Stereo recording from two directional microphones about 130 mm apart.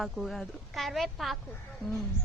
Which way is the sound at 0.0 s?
Centre (ahead or behind).